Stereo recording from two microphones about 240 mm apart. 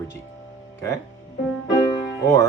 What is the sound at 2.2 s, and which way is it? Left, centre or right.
Speech, centre.